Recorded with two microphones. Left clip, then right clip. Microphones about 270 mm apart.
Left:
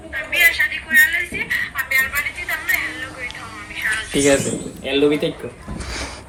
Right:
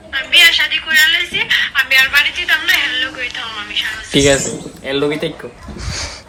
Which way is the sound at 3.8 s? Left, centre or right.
Right.